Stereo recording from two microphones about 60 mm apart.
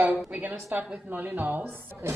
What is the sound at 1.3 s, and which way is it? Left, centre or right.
Speech, right.